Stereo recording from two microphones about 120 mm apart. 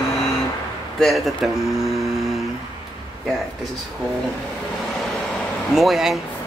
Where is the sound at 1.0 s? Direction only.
Centre (ahead or behind).